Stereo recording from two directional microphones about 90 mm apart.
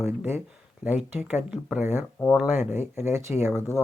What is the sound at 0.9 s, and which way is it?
Speech, 15° right (ahead or behind).